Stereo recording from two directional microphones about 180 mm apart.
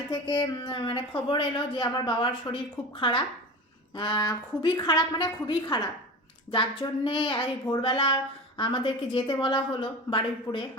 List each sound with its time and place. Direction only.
0.1 s a woman's voice: 25° left (ahead or behind)